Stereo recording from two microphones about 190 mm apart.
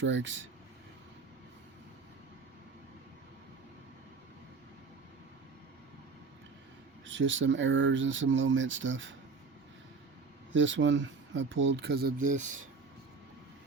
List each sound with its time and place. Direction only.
0.0 s speech: 75° right (ahead or behind)
7.0 s speech: 80° right
10.5 s speech: 80° right; by 12.5 s 40° right (ahead or behind)